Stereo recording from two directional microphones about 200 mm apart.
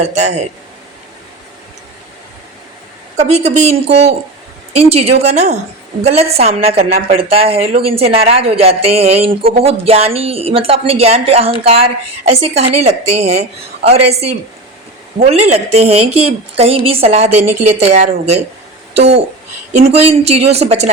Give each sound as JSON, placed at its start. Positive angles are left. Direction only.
{"t": 0.0, "sound": "a woman's voice", "side_deg": -35}
{"t": 3.2, "sound": "a woman's voice", "side_deg": -35}